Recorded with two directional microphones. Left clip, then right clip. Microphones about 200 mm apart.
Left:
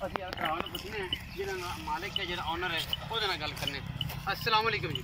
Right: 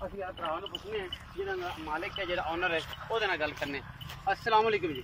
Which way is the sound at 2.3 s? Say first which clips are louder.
Right 5 dB; 45° right (ahead or behind).